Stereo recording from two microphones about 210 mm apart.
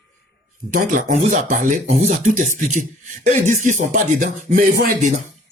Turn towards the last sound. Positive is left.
turn(degrees=-45)  # may be behind; listen again after turning